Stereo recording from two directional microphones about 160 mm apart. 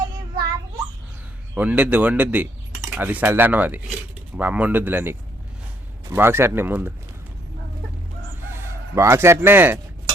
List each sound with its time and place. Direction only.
1.5 s speech: 10° right (ahead or behind)
8.5 s speech: 15° right (ahead or behind)